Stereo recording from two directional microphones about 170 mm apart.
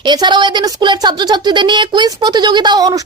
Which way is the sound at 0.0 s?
25° right (ahead or behind).